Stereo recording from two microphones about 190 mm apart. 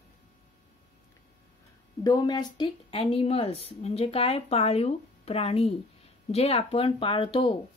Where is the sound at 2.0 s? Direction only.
20° left (ahead or behind).